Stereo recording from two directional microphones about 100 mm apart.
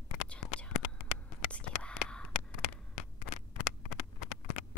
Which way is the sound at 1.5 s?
10° left (ahead or behind).